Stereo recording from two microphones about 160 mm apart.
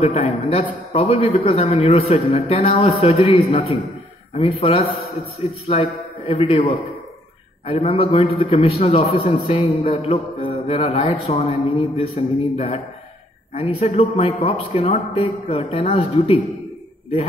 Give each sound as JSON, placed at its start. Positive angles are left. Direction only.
{"t": 0.0, "sound": "a man's voice", "side_deg": 40}